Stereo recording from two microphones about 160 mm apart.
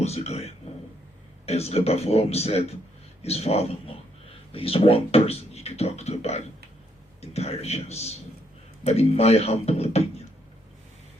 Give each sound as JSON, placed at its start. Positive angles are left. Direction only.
{"t": 0.0, "sound": "speech", "side_deg": 40}